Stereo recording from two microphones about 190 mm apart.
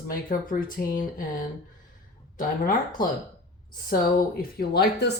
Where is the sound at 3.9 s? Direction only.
50° left (ahead or behind).